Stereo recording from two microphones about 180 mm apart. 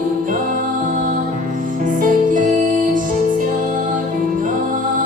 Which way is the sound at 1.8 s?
50° right (ahead or behind).